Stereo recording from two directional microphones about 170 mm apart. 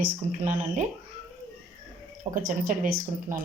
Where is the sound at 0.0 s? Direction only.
45° right (ahead or behind).